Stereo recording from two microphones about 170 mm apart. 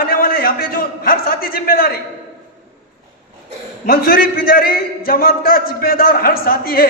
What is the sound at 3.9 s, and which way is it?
A man's voice, 60° left (ahead or behind).